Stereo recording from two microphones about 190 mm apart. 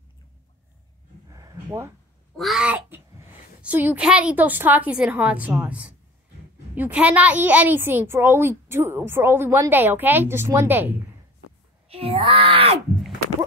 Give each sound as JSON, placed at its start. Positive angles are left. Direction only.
{"t": 1.3, "sound": "a sound", "side_deg": -15}
{"t": 2.3, "sound": "a child's voice", "side_deg": 0}
{"t": 11.9, "sound": "speech", "side_deg": -30}